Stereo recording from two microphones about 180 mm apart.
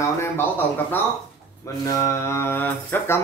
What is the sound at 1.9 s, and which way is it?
Mantra, 15° left (ahead or behind).